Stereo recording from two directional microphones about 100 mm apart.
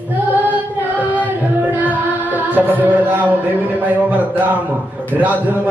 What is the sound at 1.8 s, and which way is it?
Music, 15° right (ahead or behind).